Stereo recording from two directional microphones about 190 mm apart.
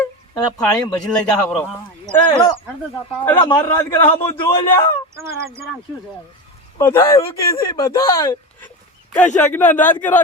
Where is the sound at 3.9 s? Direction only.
10° left (ahead or behind).